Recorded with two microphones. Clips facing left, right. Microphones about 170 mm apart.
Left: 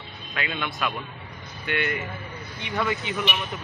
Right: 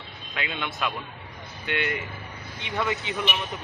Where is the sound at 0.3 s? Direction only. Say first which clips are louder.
Left 1 dB; 20° right (ahead or behind).